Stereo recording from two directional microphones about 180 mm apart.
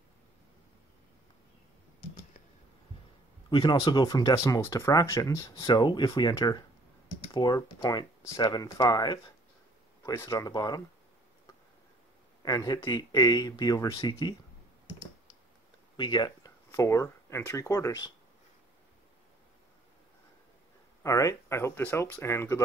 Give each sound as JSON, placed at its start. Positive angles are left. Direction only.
{"t": 3.4, "sound": "speech", "side_deg": 25}
{"t": 12.4, "sound": "speech", "side_deg": 20}
{"t": 16.0, "sound": "speech", "side_deg": 25}
{"t": 21.0, "sound": "speech", "side_deg": 15}